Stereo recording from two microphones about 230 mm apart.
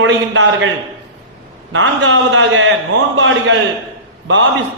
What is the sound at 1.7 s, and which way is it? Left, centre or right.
A man's voice, right.